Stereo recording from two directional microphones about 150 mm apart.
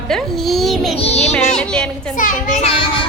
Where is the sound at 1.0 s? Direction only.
45° left (ahead or behind).